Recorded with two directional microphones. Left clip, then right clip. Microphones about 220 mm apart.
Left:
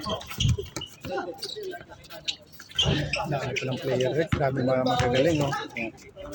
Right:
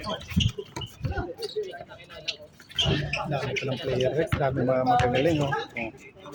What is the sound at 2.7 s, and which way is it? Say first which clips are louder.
Bird: left 1 dB; centre (ahead or behind).